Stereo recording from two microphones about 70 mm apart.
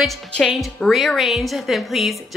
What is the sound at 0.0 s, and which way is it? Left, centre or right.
A woman's voice, centre.